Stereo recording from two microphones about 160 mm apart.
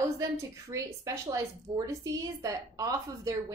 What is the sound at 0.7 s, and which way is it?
A woman's voice, 20° right (ahead or behind).